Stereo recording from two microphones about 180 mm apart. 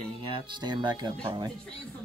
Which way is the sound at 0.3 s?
25° right (ahead or behind).